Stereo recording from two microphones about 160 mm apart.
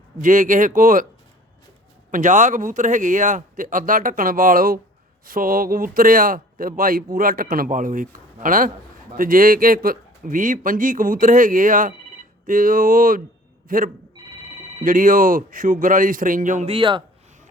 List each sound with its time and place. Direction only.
0.2 s a man's voice: 55° right (ahead or behind)
2.0 s a man's voice: 50° right (ahead or behind)
16.6 s speech: 30° right (ahead or behind)